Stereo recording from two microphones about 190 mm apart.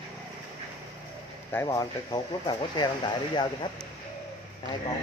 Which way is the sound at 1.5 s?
15° left (ahead or behind).